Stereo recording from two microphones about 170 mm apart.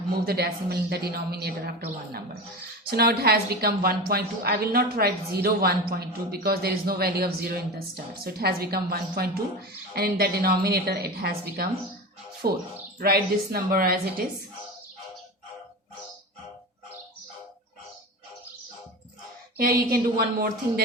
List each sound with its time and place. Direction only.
0.1 s a woman's voice: 65° right (ahead or behind)
19.5 s a woman's voice: 60° right (ahead or behind)